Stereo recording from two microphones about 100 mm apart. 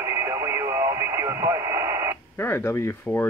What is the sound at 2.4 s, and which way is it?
Speech, 25° left (ahead or behind).